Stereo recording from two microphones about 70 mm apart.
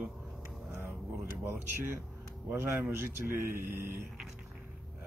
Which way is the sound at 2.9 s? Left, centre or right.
Right.